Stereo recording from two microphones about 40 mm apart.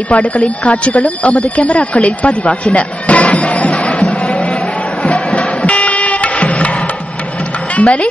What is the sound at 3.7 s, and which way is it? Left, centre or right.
Music, centre.